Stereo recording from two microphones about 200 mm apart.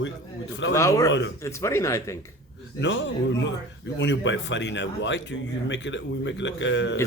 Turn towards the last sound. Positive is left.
turn(degrees=65)  # may be behind; listen again after turning